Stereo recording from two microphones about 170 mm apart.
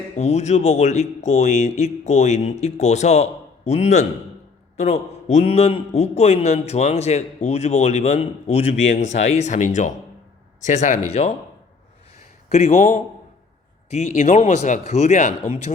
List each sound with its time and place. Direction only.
0.2 s a man's voice: 40° left (ahead or behind)
12.5 s speech: 45° left (ahead or behind)